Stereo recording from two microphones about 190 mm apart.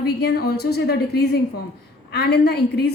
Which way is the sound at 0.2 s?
60° left (ahead or behind).